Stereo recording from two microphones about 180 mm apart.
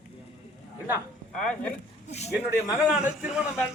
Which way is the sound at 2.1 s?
35° left (ahead or behind).